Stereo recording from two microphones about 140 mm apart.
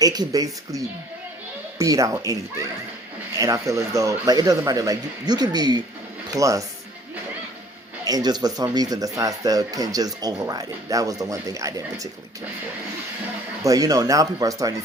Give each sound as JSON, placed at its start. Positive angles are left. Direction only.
{"t": 0.0, "sound": "speech", "side_deg": -25}
{"t": 1.8, "sound": "speech", "side_deg": -25}
{"t": 8.0, "sound": "speech", "side_deg": -25}
{"t": 13.6, "sound": "speech", "side_deg": -25}